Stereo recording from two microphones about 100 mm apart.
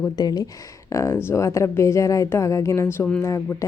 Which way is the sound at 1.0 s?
30° left (ahead or behind).